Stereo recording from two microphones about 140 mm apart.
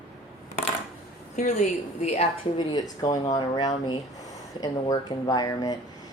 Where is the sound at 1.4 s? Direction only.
60° left (ahead or behind).